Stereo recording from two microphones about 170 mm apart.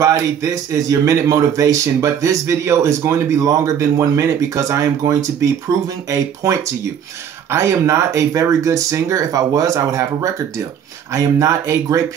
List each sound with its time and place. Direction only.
0.0 s speech: 20° right (ahead or behind)
7.5 s speech: 15° right (ahead or behind)